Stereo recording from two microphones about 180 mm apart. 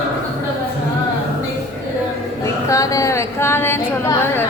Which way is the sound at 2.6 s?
20° left (ahead or behind).